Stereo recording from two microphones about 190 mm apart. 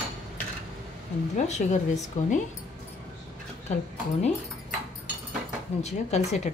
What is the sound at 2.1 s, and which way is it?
Speech, 35° left (ahead or behind).